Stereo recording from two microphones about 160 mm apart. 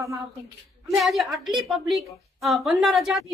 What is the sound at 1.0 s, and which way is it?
A woman's voice, centre (ahead or behind).